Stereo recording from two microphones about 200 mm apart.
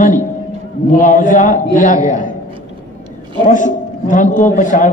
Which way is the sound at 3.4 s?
40° left (ahead or behind).